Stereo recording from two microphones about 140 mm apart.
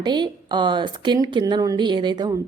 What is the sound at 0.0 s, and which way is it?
A woman's voice, 30° right (ahead or behind).